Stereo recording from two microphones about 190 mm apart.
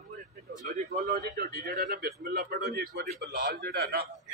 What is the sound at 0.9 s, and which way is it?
A man's voice, 50° right (ahead or behind).